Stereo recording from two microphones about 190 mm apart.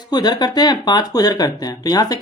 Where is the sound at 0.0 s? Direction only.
20° left (ahead or behind).